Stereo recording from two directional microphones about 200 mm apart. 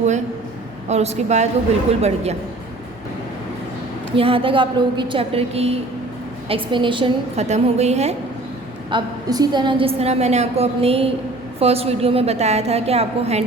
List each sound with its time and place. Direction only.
0.9 s a woman's voice: 35° right (ahead or behind)
4.1 s a woman's voice: 25° right (ahead or behind)
8.9 s a woman's voice: 20° right (ahead or behind)